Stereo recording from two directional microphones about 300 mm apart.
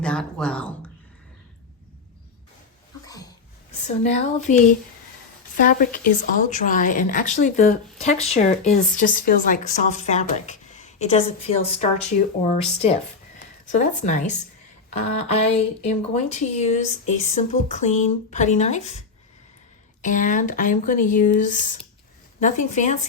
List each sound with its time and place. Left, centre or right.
0.0 s speech: centre
3.1 s a sound: centre
5.5 s a woman's voice: left
20.0 s a woman's voice: left